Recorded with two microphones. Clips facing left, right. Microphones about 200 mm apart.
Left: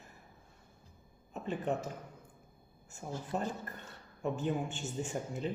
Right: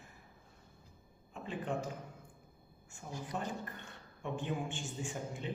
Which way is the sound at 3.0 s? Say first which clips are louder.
Left 5 dB; 30° left (ahead or behind).